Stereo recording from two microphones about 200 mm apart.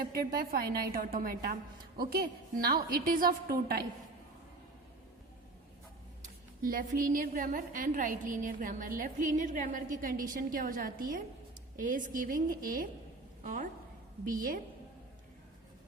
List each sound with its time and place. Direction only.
0.0 s a woman's voice: 45° right (ahead or behind)
6.6 s a woman's voice: 45° right (ahead or behind)